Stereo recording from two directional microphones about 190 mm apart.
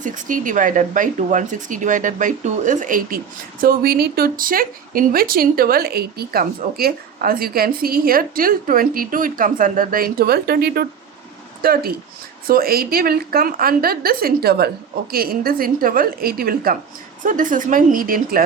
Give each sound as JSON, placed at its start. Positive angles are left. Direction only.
{"t": 0.0, "sound": "speech", "side_deg": -45}